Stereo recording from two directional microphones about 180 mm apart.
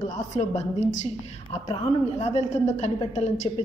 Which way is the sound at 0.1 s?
40° left (ahead or behind).